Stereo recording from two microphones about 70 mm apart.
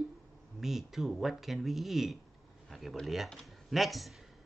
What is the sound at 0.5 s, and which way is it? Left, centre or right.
Speech, centre.